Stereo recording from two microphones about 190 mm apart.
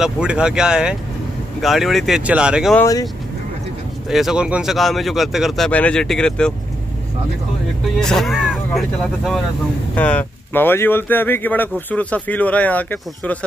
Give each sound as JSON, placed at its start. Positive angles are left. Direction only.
{"t": 0.0, "sound": "speech", "side_deg": -5}
{"t": 2.7, "sound": "speech", "side_deg": 15}
{"t": 4.1, "sound": "speech", "side_deg": 0}
{"t": 8.0, "sound": "speech", "side_deg": 0}